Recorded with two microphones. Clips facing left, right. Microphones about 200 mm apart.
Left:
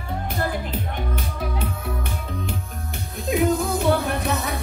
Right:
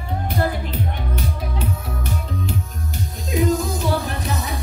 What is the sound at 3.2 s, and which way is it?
Music, 60° left (ahead or behind).